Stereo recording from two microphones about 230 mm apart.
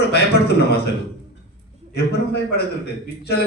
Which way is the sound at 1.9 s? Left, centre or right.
Left.